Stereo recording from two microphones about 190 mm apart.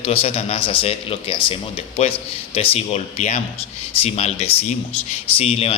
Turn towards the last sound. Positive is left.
turn(degrees=30)  # may be behind; listen again after turning